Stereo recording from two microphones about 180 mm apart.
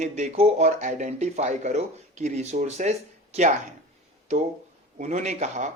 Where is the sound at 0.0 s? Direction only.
40° right (ahead or behind).